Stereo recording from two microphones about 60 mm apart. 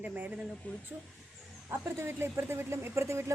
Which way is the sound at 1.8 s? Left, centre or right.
Right.